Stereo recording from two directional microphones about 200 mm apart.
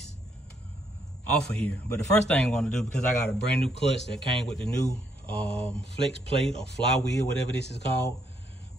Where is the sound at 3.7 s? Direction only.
60° left (ahead or behind).